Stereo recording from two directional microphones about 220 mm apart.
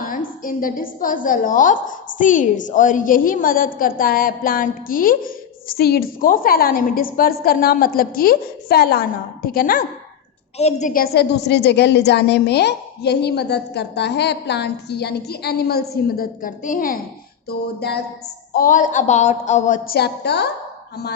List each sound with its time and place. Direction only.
0.0 s a woman's voice: 40° left (ahead or behind)
18.5 s a woman's voice: 35° left (ahead or behind)